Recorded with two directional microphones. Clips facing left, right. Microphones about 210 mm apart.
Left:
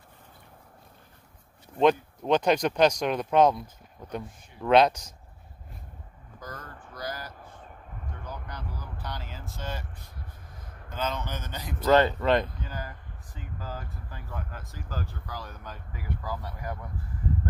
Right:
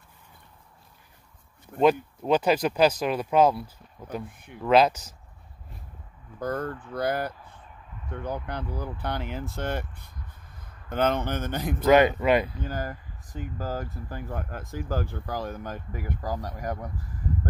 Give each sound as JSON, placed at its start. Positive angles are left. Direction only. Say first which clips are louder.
{"t": 1.8, "sound": "speech", "louder": "right 1 dB", "side_deg": -5}
{"t": 6.4, "sound": "speech", "louder": "right 13 dB", "side_deg": -55}
{"t": 10.6, "sound": "a sound", "louder": "left 4 dB", "side_deg": 55}
{"t": 10.9, "sound": "speech", "louder": "right 7 dB", "side_deg": -60}
{"t": 11.8, "sound": "speech", "louder": "right 2 dB", "side_deg": -10}
{"t": 12.6, "sound": "speech", "louder": "right 7 dB", "side_deg": -45}